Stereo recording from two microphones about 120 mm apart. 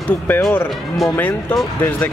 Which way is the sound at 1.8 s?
15° left (ahead or behind).